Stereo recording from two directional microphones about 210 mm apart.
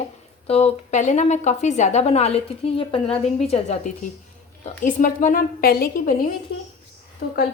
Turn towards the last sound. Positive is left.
turn(degrees=45)  # may be behind; listen again after turning